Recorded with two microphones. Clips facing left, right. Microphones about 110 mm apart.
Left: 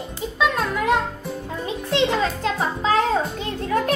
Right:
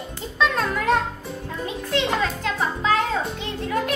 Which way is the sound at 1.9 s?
30° left (ahead or behind).